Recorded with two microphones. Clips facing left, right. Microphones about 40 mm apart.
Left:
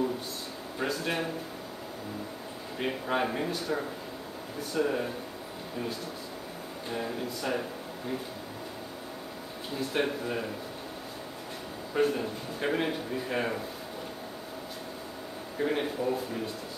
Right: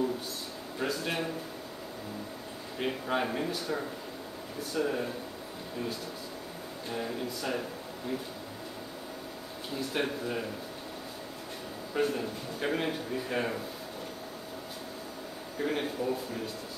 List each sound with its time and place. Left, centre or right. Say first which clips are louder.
0.7 s speech: left 1 dB; centre
2.8 s a man's voice: left 1 dB; centre
6.9 s speech: left 1 dB; centre
9.8 s a man's voice: left 2 dB; centre
11.9 s a man's voice: left 3 dB; centre
15.5 s a man's voice: left 2 dB; centre